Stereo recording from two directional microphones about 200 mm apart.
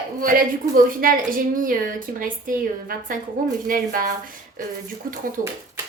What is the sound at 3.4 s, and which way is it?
Speech, 45° right (ahead or behind).